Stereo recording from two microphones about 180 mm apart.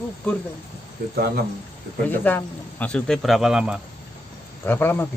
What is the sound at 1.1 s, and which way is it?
Speech, 60° right (ahead or behind).